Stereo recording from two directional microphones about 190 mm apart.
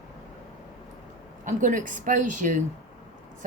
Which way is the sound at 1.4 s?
45° right (ahead or behind).